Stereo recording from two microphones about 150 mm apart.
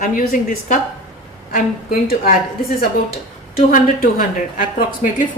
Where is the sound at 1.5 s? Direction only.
80° left.